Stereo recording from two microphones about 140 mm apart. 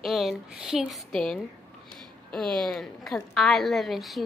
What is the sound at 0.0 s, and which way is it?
A woman's voice, centre (ahead or behind).